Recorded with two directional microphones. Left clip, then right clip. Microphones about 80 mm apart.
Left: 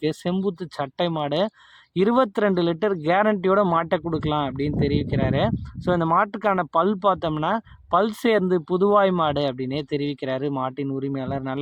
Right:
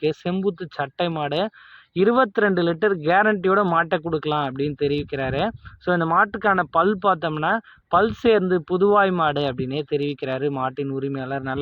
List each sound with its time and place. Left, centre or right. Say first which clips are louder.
0.0 s speech: right 2 dB; left